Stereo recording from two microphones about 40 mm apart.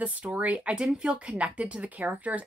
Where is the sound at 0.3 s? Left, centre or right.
Right.